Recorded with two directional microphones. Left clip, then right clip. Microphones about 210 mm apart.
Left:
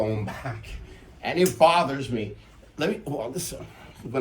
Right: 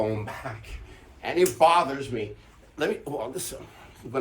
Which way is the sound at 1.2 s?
5° right (ahead or behind).